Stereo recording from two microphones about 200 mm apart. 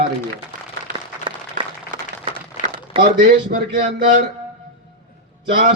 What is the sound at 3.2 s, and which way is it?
Speech, 55° right (ahead or behind).